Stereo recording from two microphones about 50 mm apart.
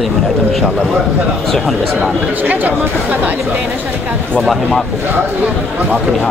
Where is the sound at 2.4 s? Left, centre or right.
Right.